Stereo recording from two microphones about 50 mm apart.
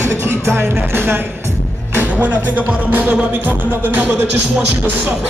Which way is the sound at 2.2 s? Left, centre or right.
Right.